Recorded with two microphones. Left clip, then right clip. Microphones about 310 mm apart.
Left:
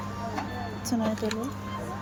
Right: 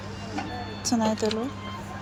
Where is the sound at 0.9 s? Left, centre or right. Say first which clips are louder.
Right 5 dB; centre.